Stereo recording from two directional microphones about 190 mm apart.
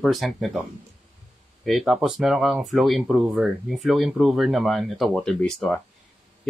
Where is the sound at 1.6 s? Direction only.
Centre (ahead or behind).